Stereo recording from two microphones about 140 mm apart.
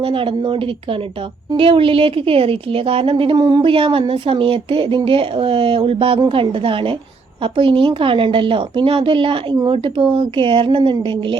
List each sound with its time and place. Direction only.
0.0 s a woman's voice: 40° right (ahead or behind)